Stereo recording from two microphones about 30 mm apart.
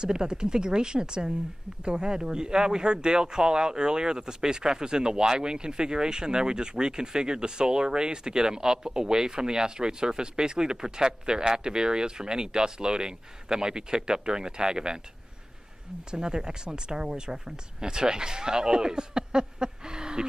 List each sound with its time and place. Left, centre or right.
0.0 s speech: right
16.1 s speech: right